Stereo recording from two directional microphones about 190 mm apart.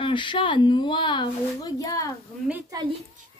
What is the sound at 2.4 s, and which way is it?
Speech, 10° right (ahead or behind).